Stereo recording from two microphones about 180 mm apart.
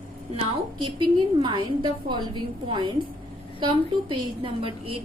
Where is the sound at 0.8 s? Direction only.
25° right (ahead or behind).